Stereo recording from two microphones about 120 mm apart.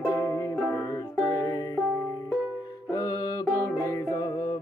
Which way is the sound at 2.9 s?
30° left (ahead or behind).